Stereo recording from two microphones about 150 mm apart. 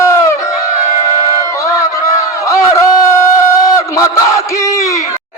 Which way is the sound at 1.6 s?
20° left (ahead or behind).